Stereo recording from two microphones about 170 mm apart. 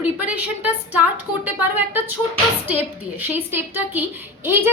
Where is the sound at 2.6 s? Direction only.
10° right (ahead or behind).